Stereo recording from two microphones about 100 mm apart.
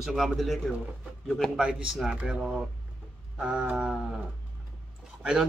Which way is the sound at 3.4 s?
10° right (ahead or behind).